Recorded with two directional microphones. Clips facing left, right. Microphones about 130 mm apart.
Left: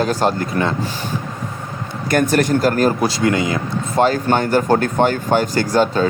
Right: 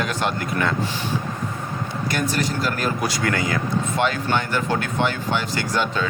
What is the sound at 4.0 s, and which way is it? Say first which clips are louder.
Speech: left 9 dB; 40° left (ahead or behind).